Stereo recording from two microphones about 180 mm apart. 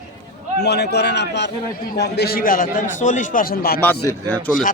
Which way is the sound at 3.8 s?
10° left (ahead or behind).